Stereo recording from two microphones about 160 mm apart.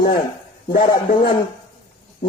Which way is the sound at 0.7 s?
65° left (ahead or behind).